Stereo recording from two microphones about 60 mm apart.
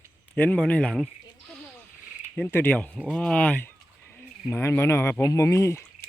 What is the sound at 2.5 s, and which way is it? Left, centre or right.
Speech, left.